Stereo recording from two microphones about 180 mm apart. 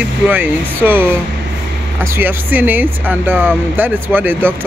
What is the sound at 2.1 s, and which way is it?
Speech, 10° right (ahead or behind).